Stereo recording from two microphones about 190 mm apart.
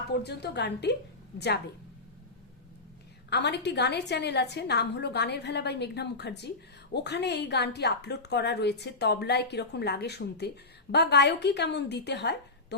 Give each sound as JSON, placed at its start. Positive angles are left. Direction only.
{"t": 0.1, "sound": "speech", "side_deg": 60}
{"t": 3.2, "sound": "speech", "side_deg": 60}